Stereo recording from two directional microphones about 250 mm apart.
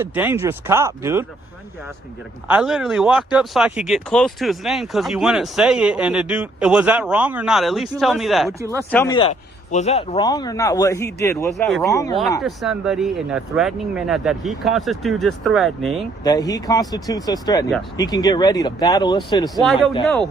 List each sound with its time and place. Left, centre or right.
0.0 s speech: centre
2.5 s speech: centre
9.1 s speech: left
11.5 s speech: centre
11.9 s speech: centre
12.4 s speech: centre
16.2 s speech: centre